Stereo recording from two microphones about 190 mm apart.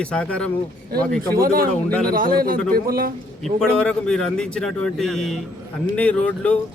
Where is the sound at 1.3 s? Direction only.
50° right (ahead or behind).